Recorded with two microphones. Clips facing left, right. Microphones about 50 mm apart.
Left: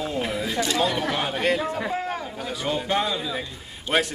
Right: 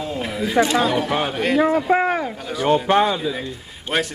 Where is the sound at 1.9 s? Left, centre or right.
Right.